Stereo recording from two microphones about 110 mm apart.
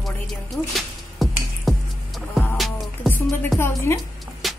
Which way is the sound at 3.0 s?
20° left (ahead or behind).